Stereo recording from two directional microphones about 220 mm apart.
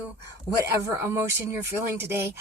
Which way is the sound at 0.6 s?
10° right (ahead or behind).